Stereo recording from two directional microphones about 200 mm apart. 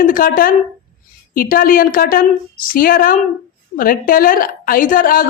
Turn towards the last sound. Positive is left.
turn(degrees=45)  # may be behind; listen again after turning